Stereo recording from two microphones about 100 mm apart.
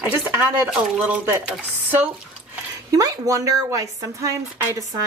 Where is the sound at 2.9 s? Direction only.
35° right (ahead or behind).